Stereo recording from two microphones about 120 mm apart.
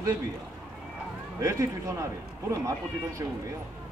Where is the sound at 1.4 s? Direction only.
25° right (ahead or behind).